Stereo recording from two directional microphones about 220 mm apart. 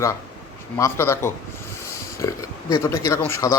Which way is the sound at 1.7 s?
15° left (ahead or behind).